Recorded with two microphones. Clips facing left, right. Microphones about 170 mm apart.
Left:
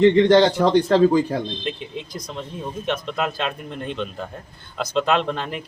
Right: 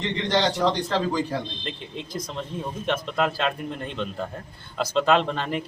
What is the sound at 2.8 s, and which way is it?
Speech, centre (ahead or behind).